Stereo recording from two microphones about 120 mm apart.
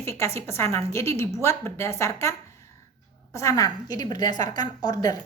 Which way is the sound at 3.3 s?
25° left (ahead or behind).